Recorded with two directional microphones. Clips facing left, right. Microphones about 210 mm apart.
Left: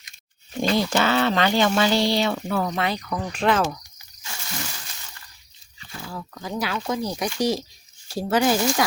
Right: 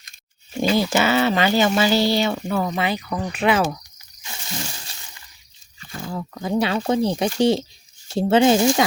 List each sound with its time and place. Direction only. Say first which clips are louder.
0.5 s speech: right 2 dB; 5° right (ahead or behind)
6.0 s speech: right 6 dB; 25° right (ahead or behind)